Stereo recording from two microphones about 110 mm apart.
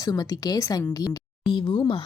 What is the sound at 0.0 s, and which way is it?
Speech, 35° left (ahead or behind).